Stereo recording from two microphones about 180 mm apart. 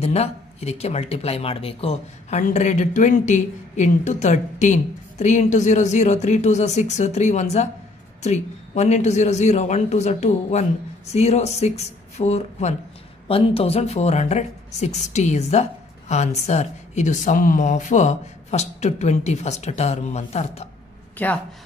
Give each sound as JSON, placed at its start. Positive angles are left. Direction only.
{"t": 0.0, "sound": "speech", "side_deg": 35}
{"t": 21.2, "sound": "speech", "side_deg": 10}